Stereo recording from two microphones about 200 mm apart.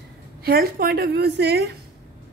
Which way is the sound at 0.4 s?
50° right (ahead or behind).